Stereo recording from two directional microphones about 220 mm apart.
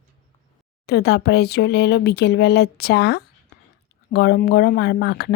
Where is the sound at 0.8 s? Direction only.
50° left (ahead or behind).